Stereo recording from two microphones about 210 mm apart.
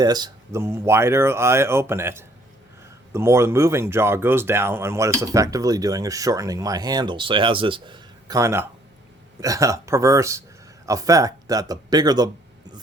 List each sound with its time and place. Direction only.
0.0 s speech: 20° right (ahead or behind)